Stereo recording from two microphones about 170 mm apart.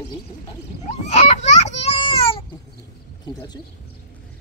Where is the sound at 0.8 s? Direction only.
40° left (ahead or behind).